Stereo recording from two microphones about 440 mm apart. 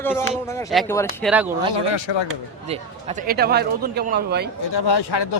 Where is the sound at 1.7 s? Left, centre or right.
Left.